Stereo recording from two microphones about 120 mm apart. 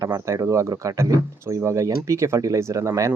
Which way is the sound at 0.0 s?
25° right (ahead or behind).